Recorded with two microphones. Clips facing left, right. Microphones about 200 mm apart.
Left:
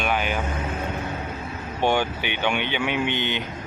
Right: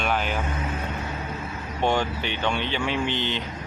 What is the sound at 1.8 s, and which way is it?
Speech, 5° left (ahead or behind).